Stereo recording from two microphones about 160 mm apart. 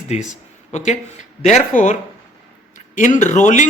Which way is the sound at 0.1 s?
50° left (ahead or behind).